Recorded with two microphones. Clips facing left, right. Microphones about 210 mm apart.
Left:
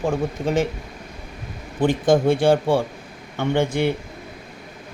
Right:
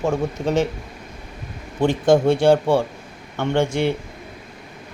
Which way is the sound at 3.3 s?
15° left (ahead or behind).